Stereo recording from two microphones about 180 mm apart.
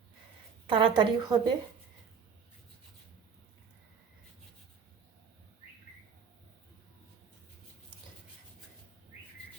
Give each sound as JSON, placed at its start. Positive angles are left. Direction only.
{"t": 0.7, "sound": "a woman's voice", "side_deg": -25}